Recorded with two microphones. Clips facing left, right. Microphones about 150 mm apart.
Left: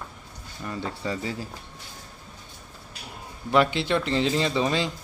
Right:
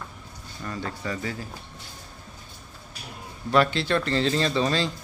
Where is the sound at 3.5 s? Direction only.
15° left (ahead or behind).